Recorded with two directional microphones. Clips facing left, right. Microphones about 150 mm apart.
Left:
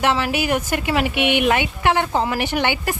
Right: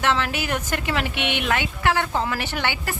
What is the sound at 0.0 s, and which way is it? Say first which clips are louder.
Speech: left 4 dB; 10° left (ahead or behind).